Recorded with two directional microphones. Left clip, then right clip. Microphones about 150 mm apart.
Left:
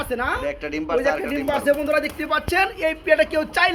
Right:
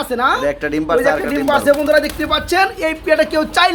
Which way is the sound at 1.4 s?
15° left (ahead or behind).